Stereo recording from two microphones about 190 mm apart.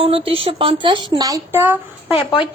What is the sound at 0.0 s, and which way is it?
A woman's voice, 30° right (ahead or behind).